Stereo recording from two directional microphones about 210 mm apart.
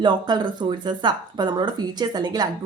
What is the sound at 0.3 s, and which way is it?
Speech, 20° right (ahead or behind).